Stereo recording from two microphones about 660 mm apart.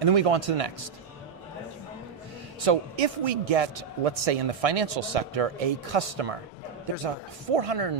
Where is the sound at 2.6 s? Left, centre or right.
Right.